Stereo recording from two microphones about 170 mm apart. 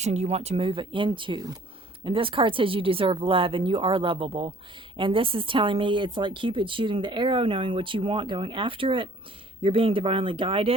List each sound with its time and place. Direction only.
0.0 s speech: 40° right (ahead or behind)